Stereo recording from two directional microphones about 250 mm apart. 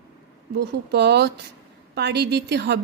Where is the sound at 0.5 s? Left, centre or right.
Right.